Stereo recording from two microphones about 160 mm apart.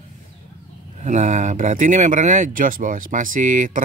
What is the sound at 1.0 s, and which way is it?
Speech, 45° right (ahead or behind).